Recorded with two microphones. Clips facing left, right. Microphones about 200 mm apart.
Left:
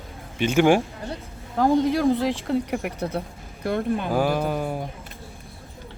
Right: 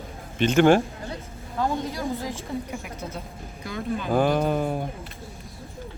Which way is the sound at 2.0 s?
80° left.